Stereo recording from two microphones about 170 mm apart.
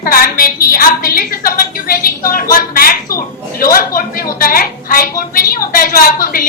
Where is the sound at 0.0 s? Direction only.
60° left (ahead or behind).